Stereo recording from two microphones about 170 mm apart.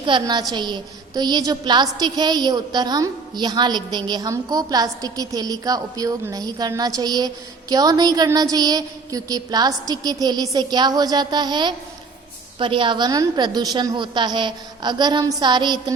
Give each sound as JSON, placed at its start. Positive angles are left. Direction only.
{"t": 0.0, "sound": "a woman's voice", "side_deg": -25}